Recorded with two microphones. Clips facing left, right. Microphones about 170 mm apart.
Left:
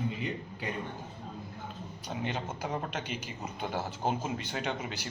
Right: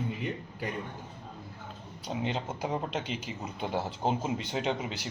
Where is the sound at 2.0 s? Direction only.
25° right (ahead or behind).